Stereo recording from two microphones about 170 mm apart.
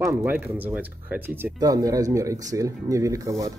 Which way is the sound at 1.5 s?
20° right (ahead or behind).